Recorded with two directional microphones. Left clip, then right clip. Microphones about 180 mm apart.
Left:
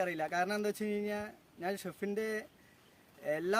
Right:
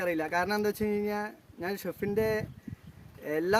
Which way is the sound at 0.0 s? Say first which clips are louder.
Right 4 dB; 15° left (ahead or behind).